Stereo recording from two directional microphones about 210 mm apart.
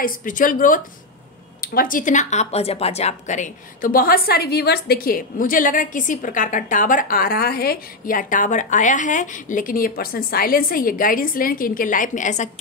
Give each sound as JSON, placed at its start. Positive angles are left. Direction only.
{"t": 0.0, "sound": "speech", "side_deg": 40}